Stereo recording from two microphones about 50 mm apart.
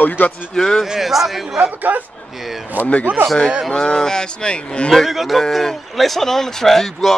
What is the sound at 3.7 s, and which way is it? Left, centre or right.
Speech, centre.